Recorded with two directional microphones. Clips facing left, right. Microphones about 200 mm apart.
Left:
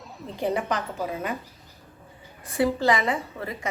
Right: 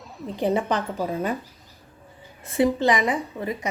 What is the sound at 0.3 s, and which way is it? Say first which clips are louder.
Speech: right 3 dB; 25° right (ahead or behind).